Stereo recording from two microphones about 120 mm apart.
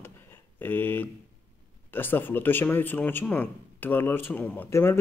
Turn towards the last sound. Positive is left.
turn(degrees=20)  # may be behind; listen again after turning